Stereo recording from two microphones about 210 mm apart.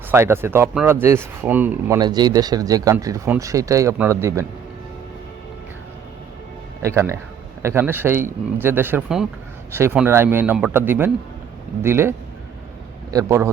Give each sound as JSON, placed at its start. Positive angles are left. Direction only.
{"t": 0.1, "sound": "speech", "side_deg": -10}
{"t": 2.0, "sound": "speech", "side_deg": -20}
{"t": 6.8, "sound": "a man's voice", "side_deg": -15}